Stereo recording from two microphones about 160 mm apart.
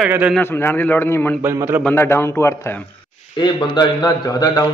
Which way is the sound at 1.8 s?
15° left (ahead or behind).